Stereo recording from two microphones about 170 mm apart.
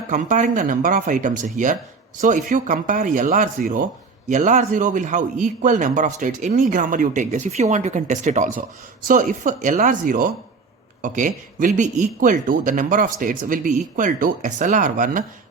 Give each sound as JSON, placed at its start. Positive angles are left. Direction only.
{"t": 0.1, "sound": "a man's voice", "side_deg": -45}